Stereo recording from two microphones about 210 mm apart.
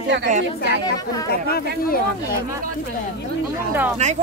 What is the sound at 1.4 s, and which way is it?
Speech, 45° left (ahead or behind).